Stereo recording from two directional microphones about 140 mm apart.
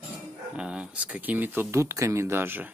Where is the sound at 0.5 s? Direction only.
5° right (ahead or behind).